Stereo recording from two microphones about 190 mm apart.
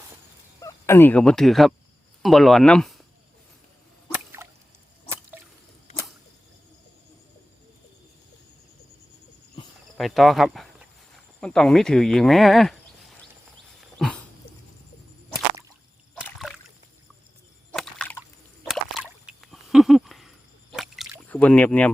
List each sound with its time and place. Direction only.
0.6 s speech: 10° left (ahead or behind)
4.4 s drip: 15° right (ahead or behind)
10.0 s speech: centre (ahead or behind)
14.0 s dog: centre (ahead or behind)
16.1 s a sound: centre (ahead or behind)
21.3 s speech: 5° left (ahead or behind)